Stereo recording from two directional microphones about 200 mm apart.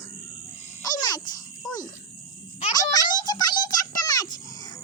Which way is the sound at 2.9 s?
20° left (ahead or behind).